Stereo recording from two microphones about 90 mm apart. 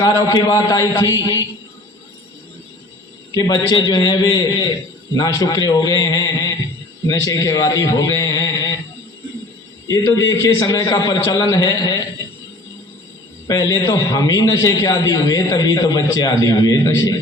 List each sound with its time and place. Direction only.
0.0 s a man's voice: 40° left (ahead or behind)
3.3 s a man's voice: 45° left (ahead or behind)
9.8 s a man's voice: 40° left (ahead or behind)
13.5 s a man's voice: 40° left (ahead or behind)